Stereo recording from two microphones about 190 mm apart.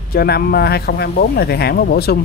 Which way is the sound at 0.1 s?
55° left (ahead or behind).